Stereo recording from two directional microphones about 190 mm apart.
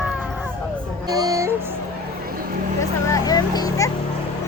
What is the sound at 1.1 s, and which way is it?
Music, 20° right (ahead or behind).